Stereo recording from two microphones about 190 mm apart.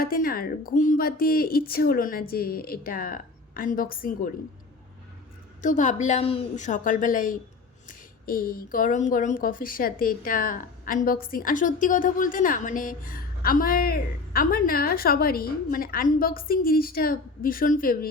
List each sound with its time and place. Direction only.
0.0 s speech: 50° left (ahead or behind)
5.6 s a woman's voice: 40° left (ahead or behind)